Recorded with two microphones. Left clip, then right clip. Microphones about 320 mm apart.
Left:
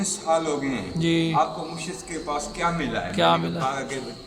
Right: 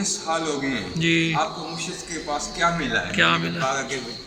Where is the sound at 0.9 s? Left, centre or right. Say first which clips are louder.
Right 2 dB; centre.